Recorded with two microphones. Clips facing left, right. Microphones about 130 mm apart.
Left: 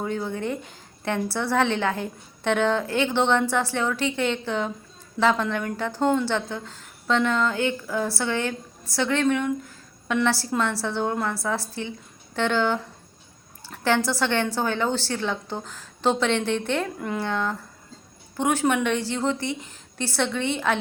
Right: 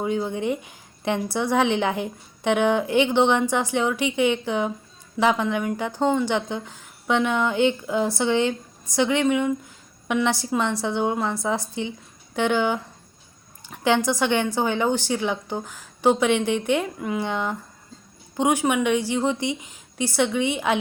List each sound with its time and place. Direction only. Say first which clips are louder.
0.0 s a woman's voice: right 3 dB; 15° right (ahead or behind)